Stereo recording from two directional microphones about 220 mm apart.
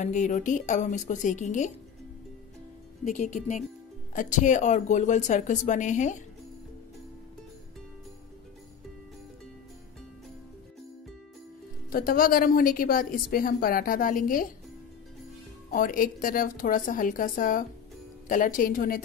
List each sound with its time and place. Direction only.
0.0 s a woman's voice: 35° left (ahead or behind)
3.1 s a woman's voice: 35° left (ahead or behind)
11.9 s a woman's voice: 40° left (ahead or behind)
15.7 s a woman's voice: 40° left (ahead or behind)